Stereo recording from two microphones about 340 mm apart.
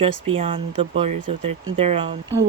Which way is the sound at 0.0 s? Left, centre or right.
Centre.